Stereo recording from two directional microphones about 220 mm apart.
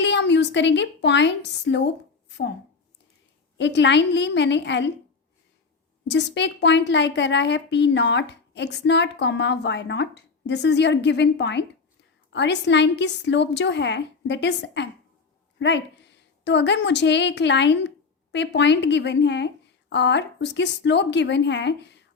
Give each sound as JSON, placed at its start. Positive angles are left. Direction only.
{"t": 0.0, "sound": "a woman's voice", "side_deg": 50}
{"t": 3.6, "sound": "a woman's voice", "side_deg": 50}
{"t": 6.1, "sound": "a woman's voice", "side_deg": 50}